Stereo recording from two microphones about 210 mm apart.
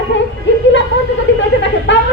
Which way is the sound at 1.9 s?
60° left (ahead or behind).